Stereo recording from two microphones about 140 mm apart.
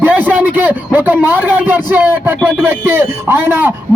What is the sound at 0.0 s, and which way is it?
A man's voice, 10° right (ahead or behind).